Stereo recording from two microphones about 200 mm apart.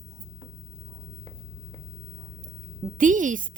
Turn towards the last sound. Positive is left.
turn(degrees=-40)  # may be behind; listen again after turning